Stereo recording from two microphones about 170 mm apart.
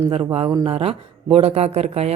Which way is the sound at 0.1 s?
30° right (ahead or behind).